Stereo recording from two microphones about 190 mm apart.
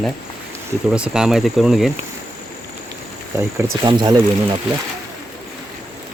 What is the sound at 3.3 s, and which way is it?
Speech, 15° right (ahead or behind).